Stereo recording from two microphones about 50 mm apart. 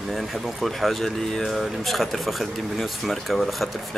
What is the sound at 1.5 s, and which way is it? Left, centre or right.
Speech, centre.